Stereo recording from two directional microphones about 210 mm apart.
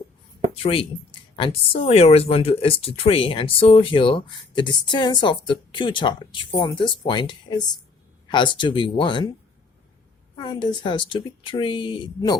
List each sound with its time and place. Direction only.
0.5 s speech: 25° left (ahead or behind)
10.3 s speech: 20° left (ahead or behind)